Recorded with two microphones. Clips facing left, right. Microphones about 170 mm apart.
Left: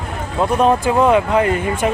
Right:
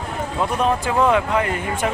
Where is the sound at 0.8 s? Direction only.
20° left (ahead or behind).